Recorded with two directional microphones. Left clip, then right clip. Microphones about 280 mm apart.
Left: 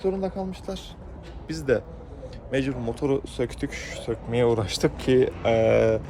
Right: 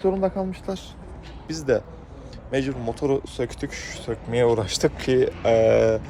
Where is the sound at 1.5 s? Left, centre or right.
Centre.